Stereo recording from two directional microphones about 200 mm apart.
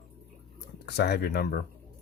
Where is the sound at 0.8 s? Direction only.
55° left (ahead or behind).